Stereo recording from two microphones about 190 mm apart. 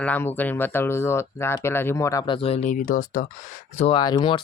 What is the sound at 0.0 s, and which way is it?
Speech, 10° left (ahead or behind).